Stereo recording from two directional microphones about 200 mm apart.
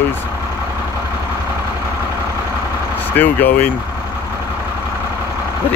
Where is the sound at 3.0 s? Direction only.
10° left (ahead or behind).